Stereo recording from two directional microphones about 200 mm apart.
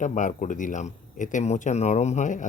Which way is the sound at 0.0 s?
40° left (ahead or behind).